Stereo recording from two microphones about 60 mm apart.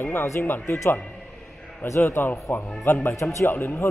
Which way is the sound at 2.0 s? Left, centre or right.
Left.